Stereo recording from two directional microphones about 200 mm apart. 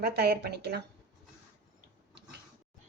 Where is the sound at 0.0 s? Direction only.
55° right (ahead or behind).